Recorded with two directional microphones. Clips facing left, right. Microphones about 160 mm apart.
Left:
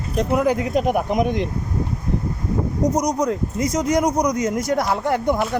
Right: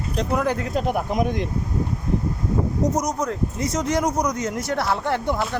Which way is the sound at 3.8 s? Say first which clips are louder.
Left 3 dB; 10° left (ahead or behind).